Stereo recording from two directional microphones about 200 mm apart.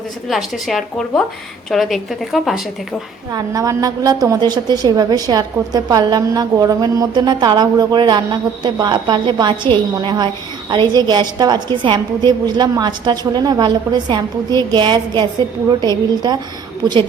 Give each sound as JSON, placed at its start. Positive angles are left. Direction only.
{"t": 0.3, "sound": "a woman's voice", "side_deg": 0}
{"t": 3.3, "sound": "a woman's voice", "side_deg": -15}
{"t": 16.8, "sound": "a woman's voice", "side_deg": -20}